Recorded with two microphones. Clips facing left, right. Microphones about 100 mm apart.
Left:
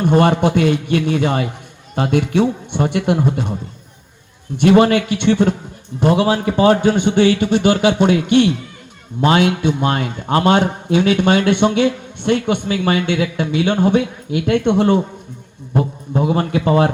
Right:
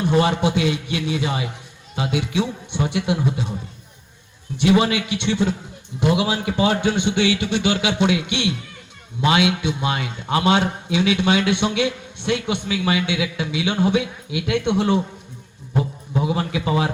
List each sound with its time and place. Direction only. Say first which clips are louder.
0.0 s a man's voice: left 5 dB; 50° left (ahead or behind)
4.5 s a man's voice: left 6 dB; 50° left (ahead or behind)